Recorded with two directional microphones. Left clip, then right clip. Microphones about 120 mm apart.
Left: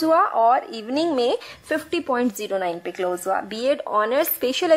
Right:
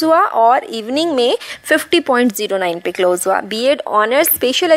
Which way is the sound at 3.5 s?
25° right (ahead or behind).